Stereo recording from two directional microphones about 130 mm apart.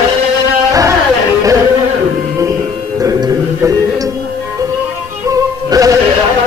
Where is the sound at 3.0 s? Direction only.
25° right (ahead or behind).